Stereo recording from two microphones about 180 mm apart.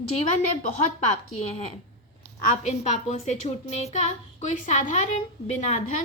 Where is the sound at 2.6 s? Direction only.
40° left (ahead or behind).